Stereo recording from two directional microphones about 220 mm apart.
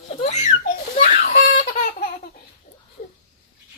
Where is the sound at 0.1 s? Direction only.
30° left (ahead or behind).